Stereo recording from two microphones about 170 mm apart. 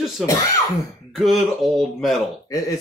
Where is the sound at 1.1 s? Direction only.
Centre (ahead or behind).